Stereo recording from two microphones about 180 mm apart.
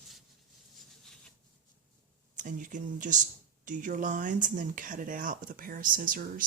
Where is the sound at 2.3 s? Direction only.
45° right (ahead or behind).